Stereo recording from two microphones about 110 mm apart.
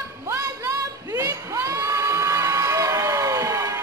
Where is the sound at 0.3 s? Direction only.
25° right (ahead or behind).